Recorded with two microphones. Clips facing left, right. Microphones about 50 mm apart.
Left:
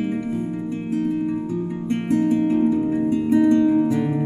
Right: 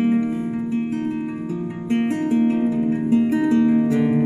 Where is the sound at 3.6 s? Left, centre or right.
Right.